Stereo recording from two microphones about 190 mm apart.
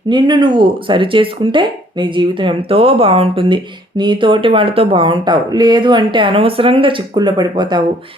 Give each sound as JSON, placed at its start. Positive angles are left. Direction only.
{"t": 0.1, "sound": "speech", "side_deg": -25}